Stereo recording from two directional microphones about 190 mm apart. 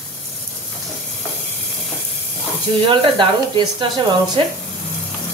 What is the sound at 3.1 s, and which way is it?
Speech, 25° right (ahead or behind).